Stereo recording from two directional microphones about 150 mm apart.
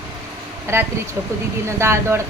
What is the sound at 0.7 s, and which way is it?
Speech, 15° right (ahead or behind).